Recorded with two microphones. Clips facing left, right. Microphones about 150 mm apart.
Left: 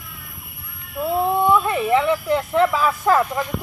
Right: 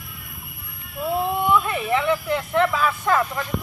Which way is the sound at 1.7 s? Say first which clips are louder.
Left 3 dB; 35° left (ahead or behind).